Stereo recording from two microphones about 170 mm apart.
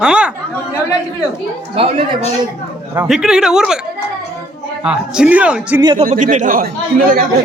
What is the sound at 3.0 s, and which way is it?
Speech, 5° right (ahead or behind).